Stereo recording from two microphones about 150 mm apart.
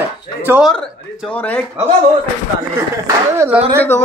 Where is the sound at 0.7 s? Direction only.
5° left (ahead or behind).